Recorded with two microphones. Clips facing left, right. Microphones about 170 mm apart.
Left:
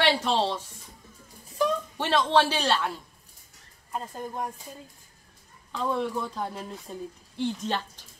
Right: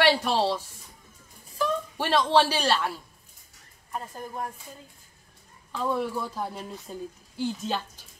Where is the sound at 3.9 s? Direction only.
15° left (ahead or behind).